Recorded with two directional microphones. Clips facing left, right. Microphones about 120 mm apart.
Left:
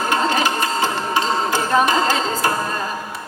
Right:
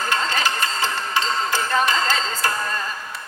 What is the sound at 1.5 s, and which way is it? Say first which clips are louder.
Speech: left 4 dB; 15° left (ahead or behind).